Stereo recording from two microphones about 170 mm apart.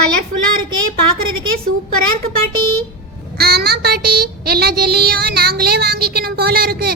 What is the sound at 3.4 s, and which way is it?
Child singing, 70° right (ahead or behind).